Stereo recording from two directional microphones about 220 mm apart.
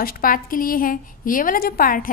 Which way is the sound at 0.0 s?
40° left (ahead or behind).